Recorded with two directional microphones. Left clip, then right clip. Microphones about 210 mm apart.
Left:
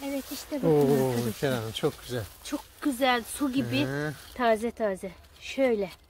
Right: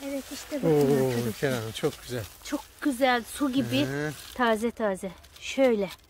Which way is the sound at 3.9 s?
Centre (ahead or behind).